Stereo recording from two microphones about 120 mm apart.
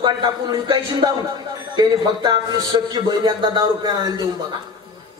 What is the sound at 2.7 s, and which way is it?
Speech, 35° right (ahead or behind).